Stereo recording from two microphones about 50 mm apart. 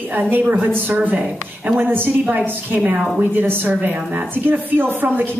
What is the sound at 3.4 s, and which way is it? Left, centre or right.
A woman's voice, right.